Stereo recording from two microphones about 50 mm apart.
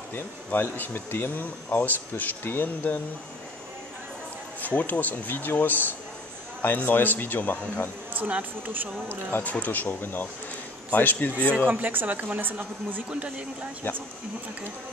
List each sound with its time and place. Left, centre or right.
0.1 s speech: left
4.6 s speech: left
8.1 s speech: right
9.4 s speech: left
11.7 s speech: right
13.1 s speech: right
13.9 s speech: left